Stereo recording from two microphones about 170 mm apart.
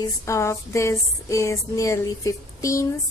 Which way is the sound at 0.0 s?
15° left (ahead or behind).